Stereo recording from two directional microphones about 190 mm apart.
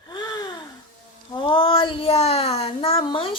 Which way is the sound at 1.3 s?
25° left (ahead or behind).